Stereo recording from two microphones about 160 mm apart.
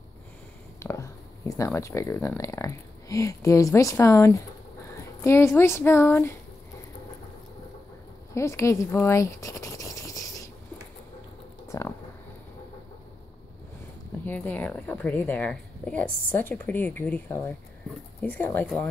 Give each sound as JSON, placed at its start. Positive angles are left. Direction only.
{"t": 0.7, "sound": "a woman's voice", "side_deg": 15}
{"t": 8.4, "sound": "toothbrush", "side_deg": 20}
{"t": 11.7, "sound": "a sound", "side_deg": 20}
{"t": 14.2, "sound": "a woman's voice", "side_deg": 10}